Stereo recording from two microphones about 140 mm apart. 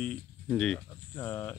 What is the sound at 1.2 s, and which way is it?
Speech, 15° left (ahead or behind).